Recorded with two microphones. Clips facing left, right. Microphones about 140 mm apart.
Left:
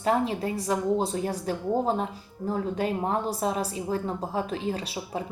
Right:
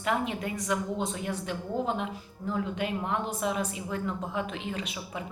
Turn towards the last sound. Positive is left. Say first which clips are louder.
# left 4 dB
turn(degrees=35)  # may be behind; listen again after turning